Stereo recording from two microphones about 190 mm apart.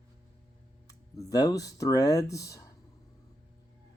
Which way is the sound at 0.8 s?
15° left (ahead or behind).